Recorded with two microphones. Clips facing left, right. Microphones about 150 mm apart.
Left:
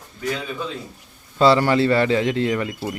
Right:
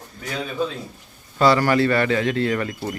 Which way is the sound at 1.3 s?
25° left (ahead or behind).